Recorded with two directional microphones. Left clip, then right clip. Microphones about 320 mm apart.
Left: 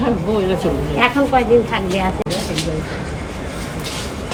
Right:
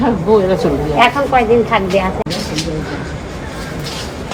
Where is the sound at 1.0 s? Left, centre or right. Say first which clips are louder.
Right 3 dB; right.